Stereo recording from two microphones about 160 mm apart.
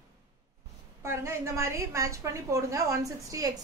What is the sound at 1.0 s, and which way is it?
A woman's voice, 15° right (ahead or behind).